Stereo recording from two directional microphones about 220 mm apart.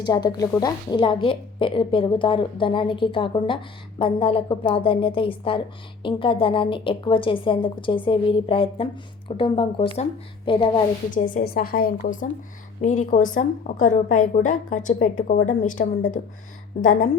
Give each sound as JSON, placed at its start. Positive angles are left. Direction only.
{"t": 0.0, "sound": "a woman's voice", "side_deg": 20}
{"t": 11.1, "sound": "a woman's voice", "side_deg": 35}